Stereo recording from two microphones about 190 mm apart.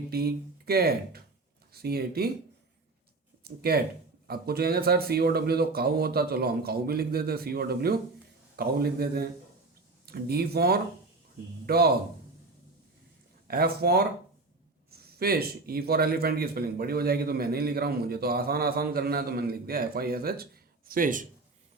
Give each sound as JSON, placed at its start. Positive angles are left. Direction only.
{"t": 0.1, "sound": "speech", "side_deg": -55}
{"t": 3.4, "sound": "a man's voice", "side_deg": -55}
{"t": 13.5, "sound": "a man's voice", "side_deg": -55}